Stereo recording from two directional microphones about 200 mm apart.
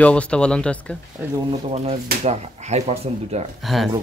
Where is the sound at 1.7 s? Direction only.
30° right (ahead or behind).